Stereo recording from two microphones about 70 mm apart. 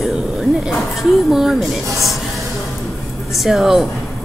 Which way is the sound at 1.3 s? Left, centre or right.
Centre.